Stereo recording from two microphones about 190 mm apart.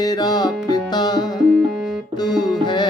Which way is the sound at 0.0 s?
20° left (ahead or behind).